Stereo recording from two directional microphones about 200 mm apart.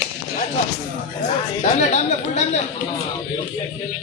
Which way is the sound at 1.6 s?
35° left (ahead or behind).